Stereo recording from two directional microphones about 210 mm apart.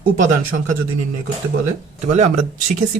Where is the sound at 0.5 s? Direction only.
65° right (ahead or behind).